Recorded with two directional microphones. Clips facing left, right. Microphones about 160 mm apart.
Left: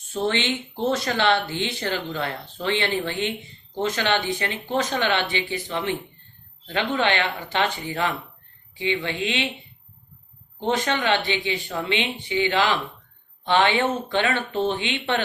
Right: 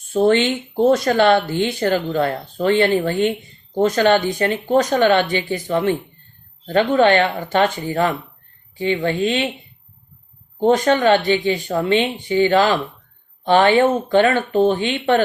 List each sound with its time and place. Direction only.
0.1 s speech: 50° right (ahead or behind)
10.6 s speech: 45° right (ahead or behind)